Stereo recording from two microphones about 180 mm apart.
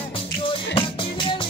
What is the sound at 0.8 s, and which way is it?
Music, 30° left (ahead or behind).